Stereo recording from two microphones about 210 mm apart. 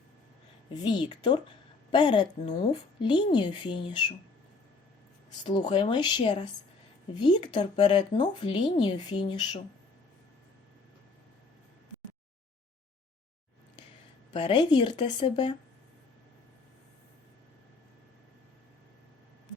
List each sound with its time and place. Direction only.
0.7 s speech: 20° left (ahead or behind)
5.4 s speech: 20° left (ahead or behind)
14.3 s speech: 20° left (ahead or behind)